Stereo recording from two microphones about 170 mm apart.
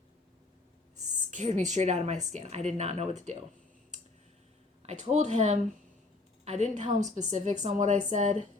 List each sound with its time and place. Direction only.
1.3 s speech: 40° right (ahead or behind)
4.8 s a woman's voice: 40° right (ahead or behind)